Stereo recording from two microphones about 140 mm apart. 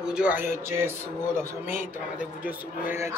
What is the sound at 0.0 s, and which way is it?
A woman's voice, 5° right (ahead or behind).